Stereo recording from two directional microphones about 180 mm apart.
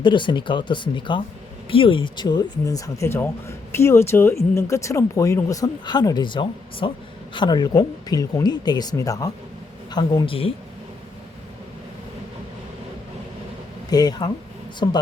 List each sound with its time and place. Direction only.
0.0 s speech: 25° left (ahead or behind)
13.9 s speech: 20° left (ahead or behind)